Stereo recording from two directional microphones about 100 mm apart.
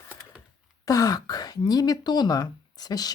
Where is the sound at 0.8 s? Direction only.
35° left (ahead or behind).